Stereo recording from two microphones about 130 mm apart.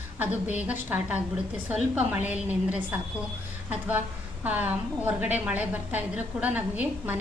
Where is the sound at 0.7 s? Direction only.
10° right (ahead or behind).